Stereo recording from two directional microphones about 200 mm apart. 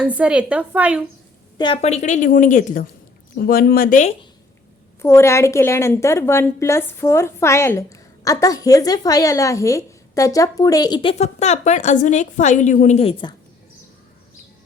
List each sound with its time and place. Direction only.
0.0 s a woman's voice: 5° right (ahead or behind)
1.5 s a woman's voice: 25° left (ahead or behind); by 4.1 s 40° left (ahead or behind)
5.0 s a woman's voice: 15° left (ahead or behind); by 13.3 s 30° left (ahead or behind)